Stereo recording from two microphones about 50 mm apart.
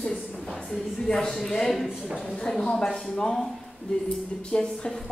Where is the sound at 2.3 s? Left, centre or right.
Centre.